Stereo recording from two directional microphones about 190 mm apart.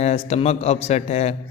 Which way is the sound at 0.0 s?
35° left (ahead or behind).